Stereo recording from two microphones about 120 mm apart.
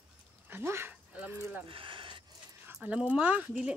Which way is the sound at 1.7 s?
45° right (ahead or behind).